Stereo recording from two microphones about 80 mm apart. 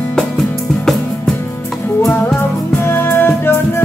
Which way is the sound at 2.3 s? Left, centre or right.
Left.